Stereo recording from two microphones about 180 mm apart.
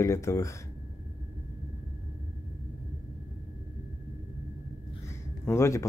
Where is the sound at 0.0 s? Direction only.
15° left (ahead or behind).